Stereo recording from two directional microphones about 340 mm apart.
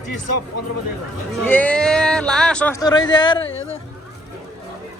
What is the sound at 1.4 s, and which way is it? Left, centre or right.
Speech, centre.